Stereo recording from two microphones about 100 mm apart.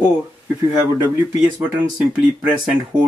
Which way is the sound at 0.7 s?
40° right (ahead or behind).